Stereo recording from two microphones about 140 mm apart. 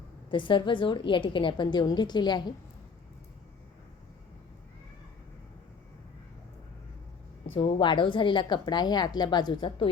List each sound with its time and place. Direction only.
0.3 s speech: 35° left (ahead or behind)
7.5 s speech: 35° left (ahead or behind)